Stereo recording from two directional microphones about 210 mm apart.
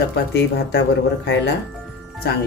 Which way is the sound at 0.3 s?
55° left (ahead or behind).